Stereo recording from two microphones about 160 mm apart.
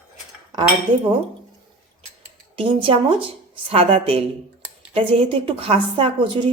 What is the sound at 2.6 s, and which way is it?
A woman's voice, 35° right (ahead or behind).